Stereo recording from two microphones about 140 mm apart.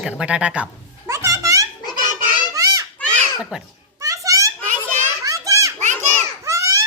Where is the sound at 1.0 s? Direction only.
20° right (ahead or behind).